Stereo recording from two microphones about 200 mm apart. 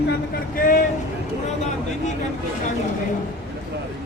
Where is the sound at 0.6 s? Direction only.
45° left (ahead or behind).